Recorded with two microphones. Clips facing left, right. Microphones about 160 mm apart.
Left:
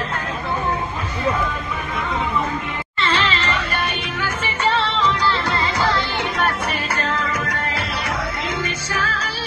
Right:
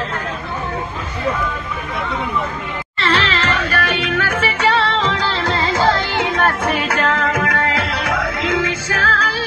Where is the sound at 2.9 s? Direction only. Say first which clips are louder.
Right 3 dB; 75° right (ahead or behind).